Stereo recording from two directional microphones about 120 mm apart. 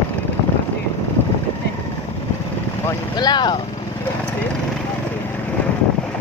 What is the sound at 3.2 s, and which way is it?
Speech, 35° left (ahead or behind).